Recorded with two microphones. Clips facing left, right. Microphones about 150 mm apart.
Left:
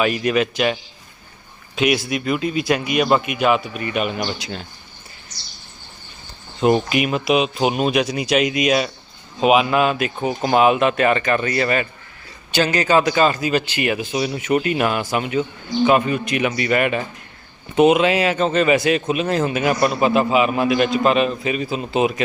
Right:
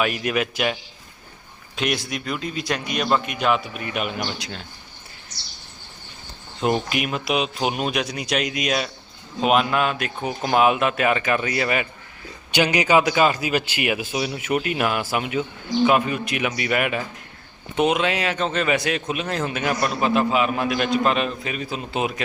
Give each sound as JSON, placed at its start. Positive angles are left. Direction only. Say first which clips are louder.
{"t": 0.0, "sound": "speech", "louder": "left 4 dB", "side_deg": -5}
{"t": 6.6, "sound": "a man's voice", "louder": "left 5 dB", "side_deg": 5}